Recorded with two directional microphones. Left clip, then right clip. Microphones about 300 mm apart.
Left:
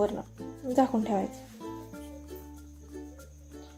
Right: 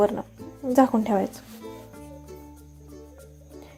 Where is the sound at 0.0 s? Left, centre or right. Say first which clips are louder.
Right 7 dB; centre.